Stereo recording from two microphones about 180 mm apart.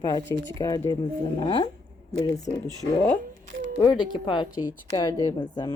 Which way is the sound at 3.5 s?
90° right.